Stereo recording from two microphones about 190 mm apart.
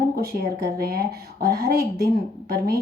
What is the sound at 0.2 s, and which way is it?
A woman's voice, 55° right (ahead or behind).